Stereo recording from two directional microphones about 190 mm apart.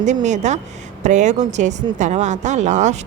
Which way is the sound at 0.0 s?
40° right (ahead or behind).